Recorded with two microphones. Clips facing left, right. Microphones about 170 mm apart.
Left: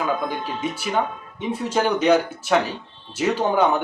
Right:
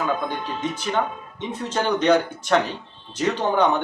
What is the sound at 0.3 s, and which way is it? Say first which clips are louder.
Speech: left 1 dB; 10° left (ahead or behind).